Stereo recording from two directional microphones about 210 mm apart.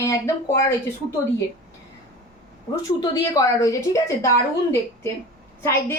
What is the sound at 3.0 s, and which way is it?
A woman's voice, 20° left (ahead or behind).